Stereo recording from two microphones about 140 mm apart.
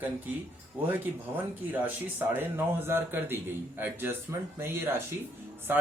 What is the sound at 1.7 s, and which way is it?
A man's voice, 15° right (ahead or behind).